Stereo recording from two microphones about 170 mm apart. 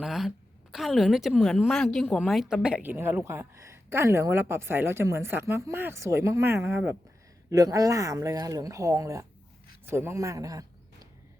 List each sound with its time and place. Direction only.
0.0 s a woman's voice: centre (ahead or behind); by 10.7 s 20° right (ahead or behind)